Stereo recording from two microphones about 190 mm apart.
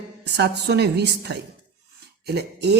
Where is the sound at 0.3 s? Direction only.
60° right (ahead or behind).